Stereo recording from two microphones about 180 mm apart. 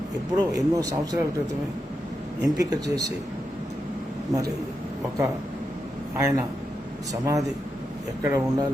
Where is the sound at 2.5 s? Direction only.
20° right (ahead or behind).